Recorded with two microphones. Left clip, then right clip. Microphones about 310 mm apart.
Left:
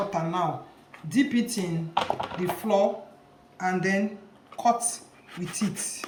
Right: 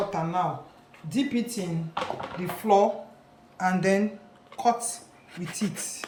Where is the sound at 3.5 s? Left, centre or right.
Right.